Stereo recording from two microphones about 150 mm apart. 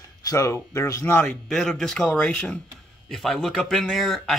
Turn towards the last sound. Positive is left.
turn(degrees=0)  # may be behind; listen again after turning